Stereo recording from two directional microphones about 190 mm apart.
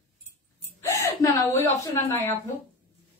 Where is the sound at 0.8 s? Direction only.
15° left (ahead or behind).